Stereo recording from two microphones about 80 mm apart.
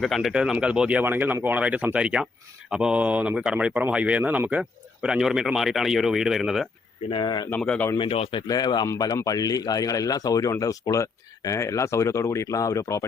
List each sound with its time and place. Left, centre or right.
0.0 s speech: centre
0.3 s speech: centre
7.1 s speech: left
8.4 s speech: left